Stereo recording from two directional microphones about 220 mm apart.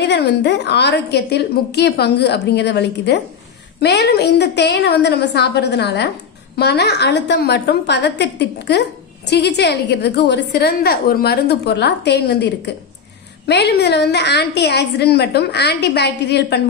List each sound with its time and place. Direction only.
0.0 s a woman's voice: 50° left (ahead or behind)